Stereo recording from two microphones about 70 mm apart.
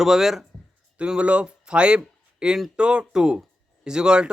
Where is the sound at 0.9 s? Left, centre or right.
Centre.